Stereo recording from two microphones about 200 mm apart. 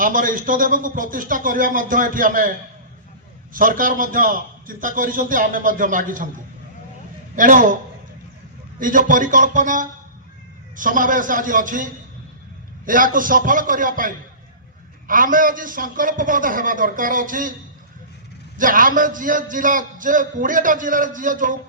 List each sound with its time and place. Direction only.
0.0 s a man's voice: 40° right (ahead or behind)
7.3 s a man's voice: 40° right (ahead or behind)
8.8 s a man's voice: 40° right (ahead or behind)
18.5 s a man's voice: 40° right (ahead or behind)